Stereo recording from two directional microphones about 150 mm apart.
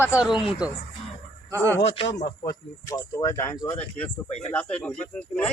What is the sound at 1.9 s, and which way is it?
Speech, 40° left (ahead or behind).